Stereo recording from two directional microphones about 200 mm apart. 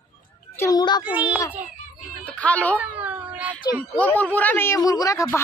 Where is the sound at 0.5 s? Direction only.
15° left (ahead or behind).